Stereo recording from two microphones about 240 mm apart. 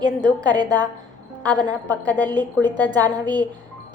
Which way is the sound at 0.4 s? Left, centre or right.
Centre.